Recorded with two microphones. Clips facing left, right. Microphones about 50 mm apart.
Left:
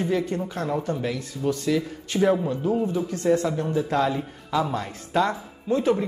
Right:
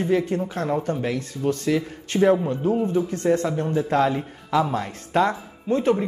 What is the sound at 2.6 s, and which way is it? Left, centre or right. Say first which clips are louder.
Speech: right 3 dB; right.